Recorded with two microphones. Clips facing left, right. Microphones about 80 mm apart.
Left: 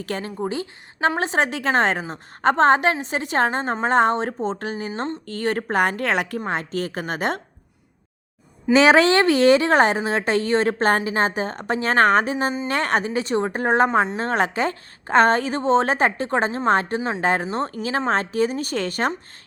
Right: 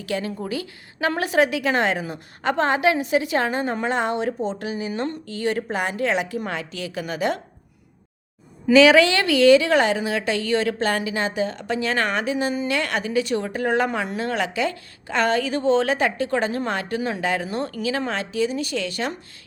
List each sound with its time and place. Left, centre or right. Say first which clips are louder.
0.0 s a woman's voice: right 2 dB; left
0.3 s a woman's voice: left 2 dB; left
3.8 s a woman's voice: left 8 dB; left
5.2 s a woman's voice: even; left
8.7 s a woman's voice: even; left